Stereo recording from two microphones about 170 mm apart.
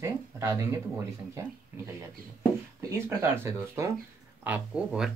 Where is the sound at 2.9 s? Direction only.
15° right (ahead or behind).